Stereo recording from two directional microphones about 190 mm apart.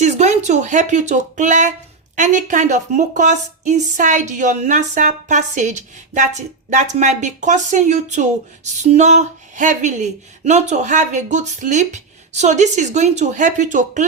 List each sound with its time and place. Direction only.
0.0 s speech: 35° right (ahead or behind)